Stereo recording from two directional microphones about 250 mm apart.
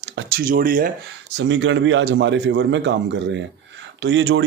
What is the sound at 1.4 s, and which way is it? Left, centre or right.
Speech, right.